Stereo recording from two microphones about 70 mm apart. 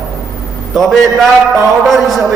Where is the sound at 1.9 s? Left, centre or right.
Centre.